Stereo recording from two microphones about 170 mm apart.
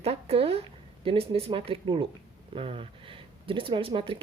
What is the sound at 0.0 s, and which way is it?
Speech, 35° right (ahead or behind).